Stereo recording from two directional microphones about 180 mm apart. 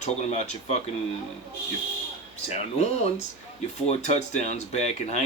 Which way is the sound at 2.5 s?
35° left (ahead or behind).